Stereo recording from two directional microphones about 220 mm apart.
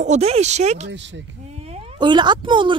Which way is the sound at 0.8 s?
55° right (ahead or behind).